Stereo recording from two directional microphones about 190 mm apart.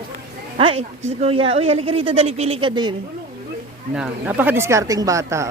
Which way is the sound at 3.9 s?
5° right (ahead or behind).